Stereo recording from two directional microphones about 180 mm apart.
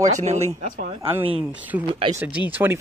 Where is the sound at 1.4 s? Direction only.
10° right (ahead or behind).